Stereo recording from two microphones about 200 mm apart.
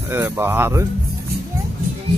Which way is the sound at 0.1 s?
10° right (ahead or behind).